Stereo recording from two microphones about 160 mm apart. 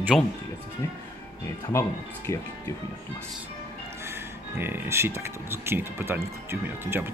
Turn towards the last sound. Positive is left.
turn(degrees=-15)  # may be behind; listen again after turning